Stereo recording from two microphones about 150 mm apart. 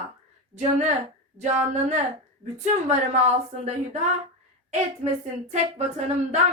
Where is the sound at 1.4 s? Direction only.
50° right (ahead or behind).